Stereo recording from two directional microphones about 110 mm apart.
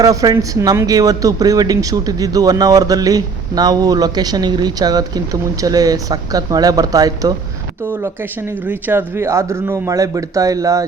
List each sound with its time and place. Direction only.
0.0 s speech: 35° right (ahead or behind)
8.0 s speech: 25° right (ahead or behind)